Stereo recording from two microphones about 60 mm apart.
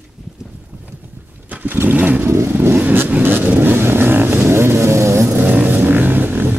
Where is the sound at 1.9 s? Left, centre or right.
Right.